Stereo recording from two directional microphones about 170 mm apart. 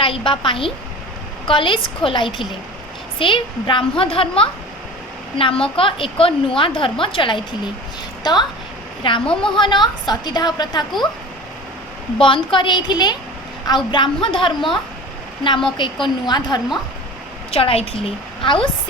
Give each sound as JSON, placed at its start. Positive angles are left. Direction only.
{"t": 0.0, "sound": "a woman's voice", "side_deg": 30}
{"t": 12.2, "sound": "a woman's voice", "side_deg": 30}
{"t": 15.8, "sound": "a woman's voice", "side_deg": 25}